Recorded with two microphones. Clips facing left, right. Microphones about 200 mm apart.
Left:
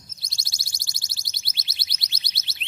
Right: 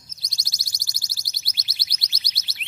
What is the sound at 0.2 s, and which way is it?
Alarm, 25° left (ahead or behind).